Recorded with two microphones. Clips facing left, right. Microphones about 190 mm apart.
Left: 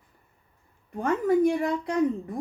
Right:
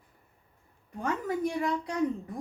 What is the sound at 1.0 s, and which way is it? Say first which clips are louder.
Speech: left 8 dB; 55° left (ahead or behind).